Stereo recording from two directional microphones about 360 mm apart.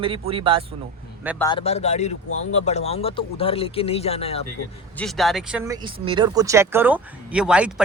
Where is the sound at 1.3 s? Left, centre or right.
Centre.